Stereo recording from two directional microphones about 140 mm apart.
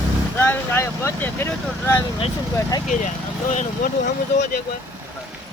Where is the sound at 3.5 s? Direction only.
65° left (ahead or behind).